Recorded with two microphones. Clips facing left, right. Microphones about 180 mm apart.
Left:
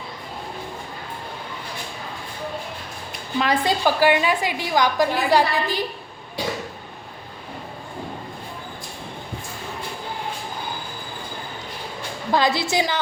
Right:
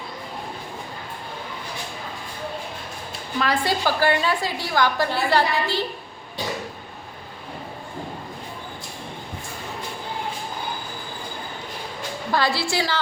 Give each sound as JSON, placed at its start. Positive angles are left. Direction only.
{"t": 3.3, "sound": "a woman's voice", "side_deg": 20}
{"t": 12.3, "sound": "a woman's voice", "side_deg": 20}